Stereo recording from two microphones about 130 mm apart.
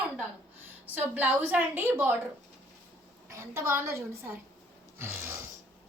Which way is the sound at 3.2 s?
20° right (ahead or behind).